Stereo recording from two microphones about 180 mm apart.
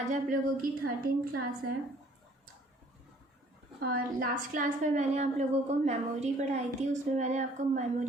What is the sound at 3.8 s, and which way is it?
A woman's voice, 55° right (ahead or behind).